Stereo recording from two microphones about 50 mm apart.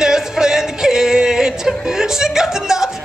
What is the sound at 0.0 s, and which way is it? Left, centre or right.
Music, centre.